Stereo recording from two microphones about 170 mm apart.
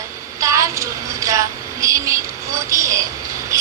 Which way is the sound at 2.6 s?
20° right (ahead or behind).